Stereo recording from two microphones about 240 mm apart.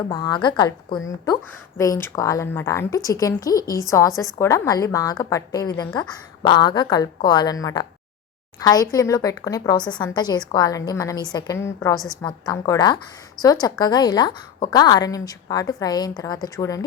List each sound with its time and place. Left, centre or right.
0.1 s a woman's voice: centre